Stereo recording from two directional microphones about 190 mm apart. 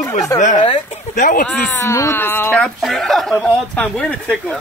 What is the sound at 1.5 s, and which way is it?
Speech, 15° left (ahead or behind).